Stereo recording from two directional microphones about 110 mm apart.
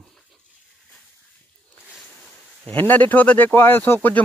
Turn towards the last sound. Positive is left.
turn(degrees=15)  # may be behind; listen again after turning